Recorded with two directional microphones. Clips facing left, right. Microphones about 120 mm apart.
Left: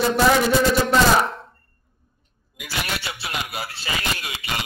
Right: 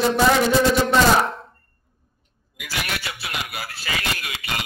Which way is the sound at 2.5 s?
25° left (ahead or behind).